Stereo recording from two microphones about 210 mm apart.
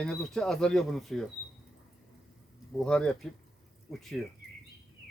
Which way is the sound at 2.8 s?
5° left (ahead or behind).